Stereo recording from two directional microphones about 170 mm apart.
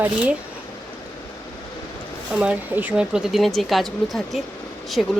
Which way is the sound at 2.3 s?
5° right (ahead or behind).